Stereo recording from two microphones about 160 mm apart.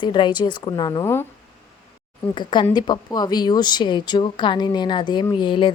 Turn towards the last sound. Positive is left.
turn(degrees=30)  # may be behind; listen again after turning